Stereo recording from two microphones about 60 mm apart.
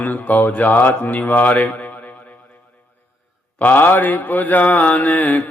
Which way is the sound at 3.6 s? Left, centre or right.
Left.